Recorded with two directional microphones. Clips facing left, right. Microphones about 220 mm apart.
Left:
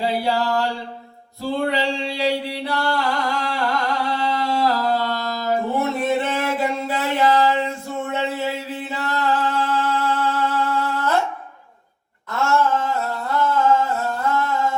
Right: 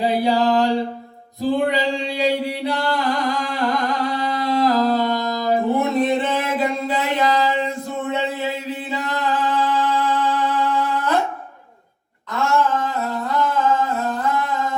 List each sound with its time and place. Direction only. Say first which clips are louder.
0.0 s a sound: right 4 dB; 15° right (ahead or behind)
1.4 s singing: right 3 dB; 15° right (ahead or behind)
12.3 s humming: even; 15° right (ahead or behind)